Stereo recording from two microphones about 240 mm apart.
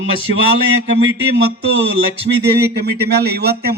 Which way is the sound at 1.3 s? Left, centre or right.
Right.